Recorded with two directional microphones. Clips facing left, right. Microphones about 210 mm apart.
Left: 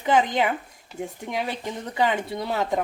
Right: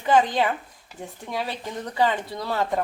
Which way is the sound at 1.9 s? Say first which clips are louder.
Even; 15° left (ahead or behind).